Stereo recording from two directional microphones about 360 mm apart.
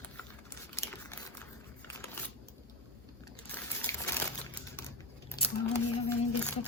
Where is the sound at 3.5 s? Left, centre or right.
Centre.